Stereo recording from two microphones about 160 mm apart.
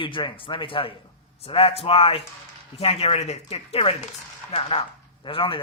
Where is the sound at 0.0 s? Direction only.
30° left (ahead or behind).